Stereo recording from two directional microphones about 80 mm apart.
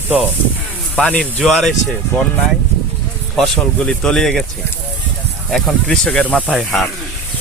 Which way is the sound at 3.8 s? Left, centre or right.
Centre.